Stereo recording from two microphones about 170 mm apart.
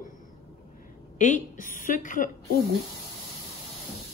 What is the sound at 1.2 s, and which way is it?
A woman's voice, 45° left (ahead or behind).